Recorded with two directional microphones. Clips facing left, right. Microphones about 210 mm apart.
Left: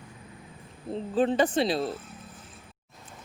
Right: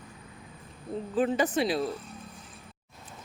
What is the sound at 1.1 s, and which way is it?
Speech, 30° left (ahead or behind).